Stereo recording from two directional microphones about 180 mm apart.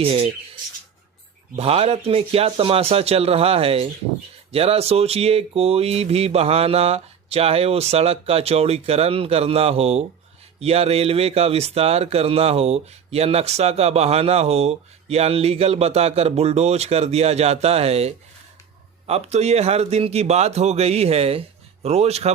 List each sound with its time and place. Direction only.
0.0 s speech: 30° right (ahead or behind)
1.5 s speech: 35° right (ahead or behind)